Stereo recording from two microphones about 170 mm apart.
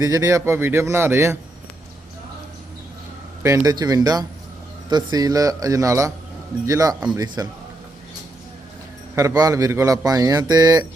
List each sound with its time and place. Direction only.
0.0 s speech: 20° right (ahead or behind)
3.4 s a man's voice: 20° right (ahead or behind)
9.1 s a man's voice: 20° right (ahead or behind)